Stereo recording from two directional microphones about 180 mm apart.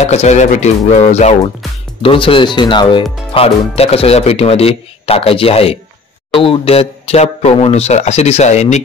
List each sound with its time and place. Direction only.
0.0 s speech: 40° left (ahead or behind)